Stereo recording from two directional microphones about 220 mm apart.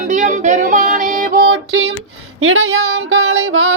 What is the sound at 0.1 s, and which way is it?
Music, 35° right (ahead or behind).